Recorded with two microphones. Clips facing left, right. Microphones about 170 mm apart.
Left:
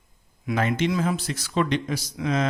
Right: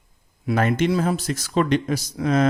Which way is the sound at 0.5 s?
50° right (ahead or behind).